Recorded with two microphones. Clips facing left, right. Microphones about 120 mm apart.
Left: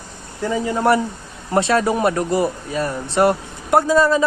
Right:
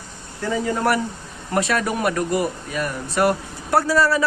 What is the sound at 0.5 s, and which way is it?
Speech, 20° left (ahead or behind).